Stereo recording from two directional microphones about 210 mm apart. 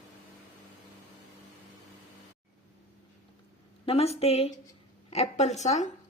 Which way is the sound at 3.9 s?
30° left (ahead or behind).